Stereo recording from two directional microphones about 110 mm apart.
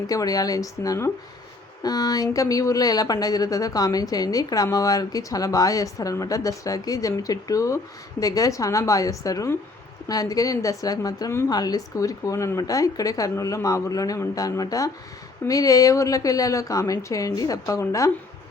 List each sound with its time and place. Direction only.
0.1 s speech: 35° left (ahead or behind)